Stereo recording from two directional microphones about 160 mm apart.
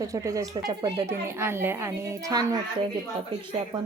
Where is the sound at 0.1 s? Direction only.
20° right (ahead or behind).